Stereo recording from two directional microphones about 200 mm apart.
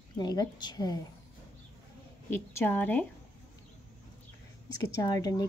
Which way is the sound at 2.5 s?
10° left (ahead or behind).